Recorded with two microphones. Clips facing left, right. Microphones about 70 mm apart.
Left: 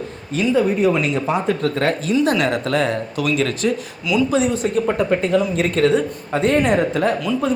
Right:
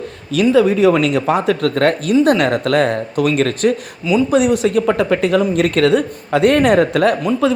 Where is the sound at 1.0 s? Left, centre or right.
Right.